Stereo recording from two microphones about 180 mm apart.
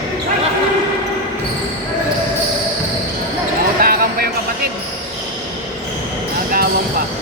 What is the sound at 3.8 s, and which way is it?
Basketball bounce, 55° right (ahead or behind).